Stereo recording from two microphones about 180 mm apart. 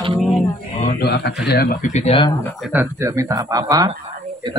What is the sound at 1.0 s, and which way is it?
A man's voice, 65° left (ahead or behind).